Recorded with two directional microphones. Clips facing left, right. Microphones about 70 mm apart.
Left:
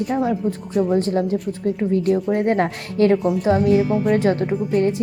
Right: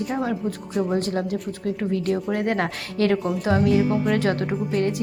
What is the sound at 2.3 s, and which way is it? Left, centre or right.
Speech, left.